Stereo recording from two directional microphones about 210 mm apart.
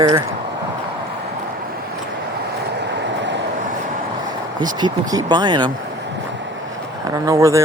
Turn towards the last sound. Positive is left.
turn(degrees=-15)  # may be behind; listen again after turning